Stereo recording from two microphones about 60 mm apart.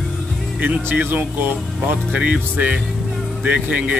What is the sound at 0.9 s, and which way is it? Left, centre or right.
Speech, right.